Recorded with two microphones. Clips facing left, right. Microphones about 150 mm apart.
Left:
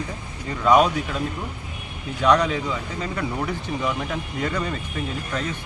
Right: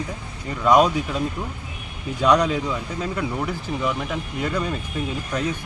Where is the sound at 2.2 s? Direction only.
10° right (ahead or behind).